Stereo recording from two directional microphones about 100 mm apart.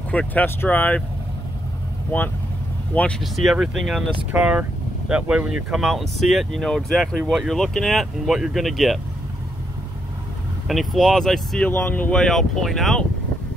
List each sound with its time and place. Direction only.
0.1 s speech: 15° left (ahead or behind)
2.1 s speech: 20° left (ahead or behind)
3.2 s speech: centre (ahead or behind)
4.3 s speech: 15° right (ahead or behind)
10.7 s speech: centre (ahead or behind)
11.7 s speech: 20° left (ahead or behind)
12.2 s speech: 5° left (ahead or behind)